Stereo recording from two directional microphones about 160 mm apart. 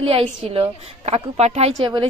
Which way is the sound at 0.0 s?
35° right (ahead or behind).